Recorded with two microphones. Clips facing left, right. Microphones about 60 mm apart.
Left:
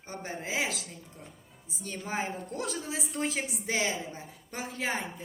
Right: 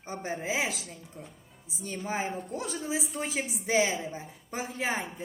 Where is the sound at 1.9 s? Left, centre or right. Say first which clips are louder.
Right 2 dB; centre.